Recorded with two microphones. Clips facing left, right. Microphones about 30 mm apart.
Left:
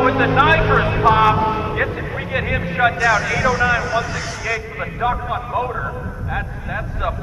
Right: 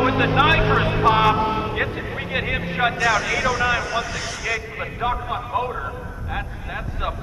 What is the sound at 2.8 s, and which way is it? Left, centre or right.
Speech, left.